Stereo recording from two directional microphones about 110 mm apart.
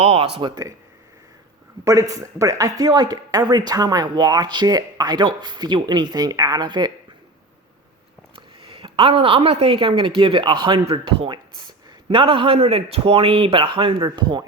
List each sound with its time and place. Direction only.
0.0 s speech: 65° right (ahead or behind)
1.8 s speech: 30° right (ahead or behind)
8.6 s a woman's voice: 55° right (ahead or behind)